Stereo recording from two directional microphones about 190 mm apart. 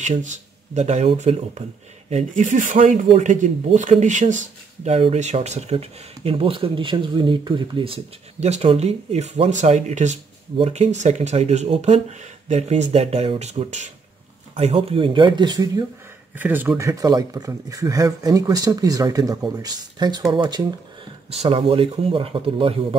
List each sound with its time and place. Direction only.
0.0 s speech: 40° right (ahead or behind); by 15.8 s 20° right (ahead or behind)
16.3 s speech: 10° right (ahead or behind); by 22.9 s 30° right (ahead or behind)